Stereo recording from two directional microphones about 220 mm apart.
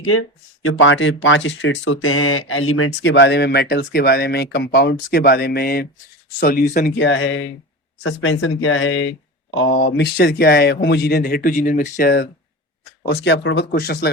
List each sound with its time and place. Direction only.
0.0 s speech: 75° left (ahead or behind); by 14.1 s 45° left (ahead or behind)